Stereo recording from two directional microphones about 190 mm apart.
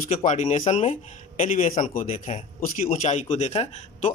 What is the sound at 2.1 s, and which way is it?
A man's voice, 35° left (ahead or behind).